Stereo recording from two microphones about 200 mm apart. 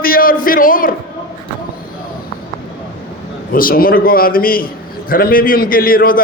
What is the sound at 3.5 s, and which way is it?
A man's voice, 45° left (ahead or behind).